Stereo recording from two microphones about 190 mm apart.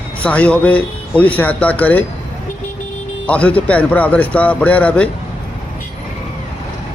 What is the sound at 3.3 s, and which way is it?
A man's voice, 5° left (ahead or behind).